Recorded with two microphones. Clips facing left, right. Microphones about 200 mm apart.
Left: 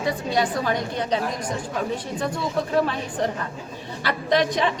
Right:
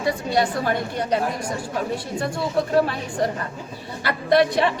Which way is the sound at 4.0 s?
60° right (ahead or behind).